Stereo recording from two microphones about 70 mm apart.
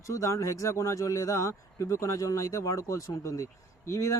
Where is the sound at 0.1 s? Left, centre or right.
Left.